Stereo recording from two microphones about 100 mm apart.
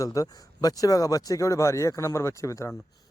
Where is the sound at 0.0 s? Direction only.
35° left (ahead or behind).